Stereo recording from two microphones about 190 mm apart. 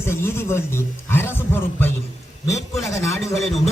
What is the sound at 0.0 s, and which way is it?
A man's voice, 15° left (ahead or behind).